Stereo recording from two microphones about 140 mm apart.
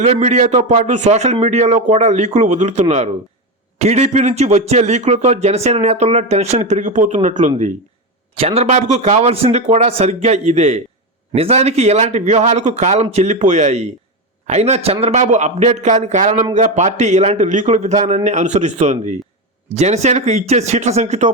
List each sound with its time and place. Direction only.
0.0 s a man's voice: 55° right (ahead or behind)
8.4 s a man's voice: 45° right (ahead or behind)
15.0 s a man's voice: 60° right (ahead or behind)